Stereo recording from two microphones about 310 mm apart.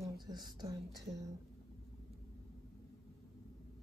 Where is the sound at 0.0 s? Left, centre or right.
Centre.